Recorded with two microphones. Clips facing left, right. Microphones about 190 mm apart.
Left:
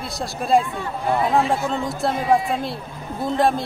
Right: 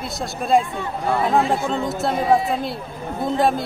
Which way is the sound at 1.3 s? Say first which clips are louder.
Right 1 dB; centre (ahead or behind).